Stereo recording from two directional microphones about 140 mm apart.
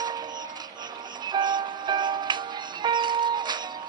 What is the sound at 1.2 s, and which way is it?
Music, 30° right (ahead or behind).